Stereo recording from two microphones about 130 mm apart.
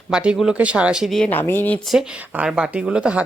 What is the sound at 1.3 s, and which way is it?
Speech, 15° left (ahead or behind).